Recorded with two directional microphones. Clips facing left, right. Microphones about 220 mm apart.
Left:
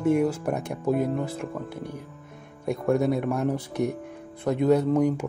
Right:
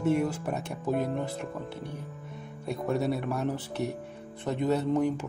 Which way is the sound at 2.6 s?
10° left (ahead or behind).